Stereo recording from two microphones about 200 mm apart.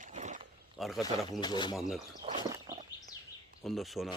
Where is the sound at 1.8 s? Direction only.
Centre (ahead or behind).